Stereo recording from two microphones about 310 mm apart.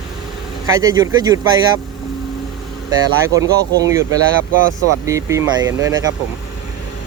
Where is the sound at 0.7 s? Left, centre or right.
Centre.